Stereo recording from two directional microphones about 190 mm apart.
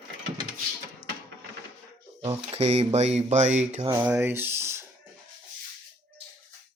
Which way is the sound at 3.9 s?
10° right (ahead or behind).